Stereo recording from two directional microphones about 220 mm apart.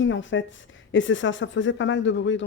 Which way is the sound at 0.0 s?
60° left (ahead or behind).